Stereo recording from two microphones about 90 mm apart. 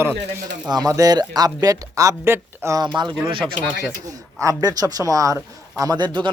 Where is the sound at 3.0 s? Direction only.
55° right (ahead or behind).